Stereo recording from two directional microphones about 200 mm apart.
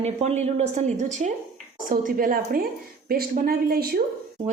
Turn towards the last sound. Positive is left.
turn(degrees=-50)  # may be behind; listen again after turning